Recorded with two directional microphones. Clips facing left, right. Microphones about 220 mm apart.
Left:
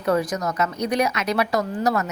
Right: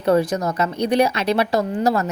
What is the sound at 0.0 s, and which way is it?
A woman's voice, 30° right (ahead or behind).